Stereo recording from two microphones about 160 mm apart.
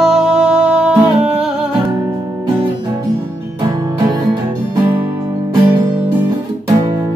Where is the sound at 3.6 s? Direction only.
25° right (ahead or behind).